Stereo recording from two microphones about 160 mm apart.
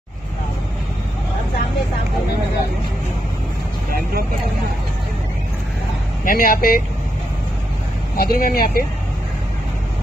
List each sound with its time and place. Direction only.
6.2 s speech: 60° left (ahead or behind)
8.2 s speech: 65° left (ahead or behind)